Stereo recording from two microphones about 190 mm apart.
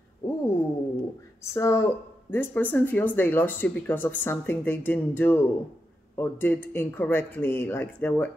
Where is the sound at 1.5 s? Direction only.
15° left (ahead or behind).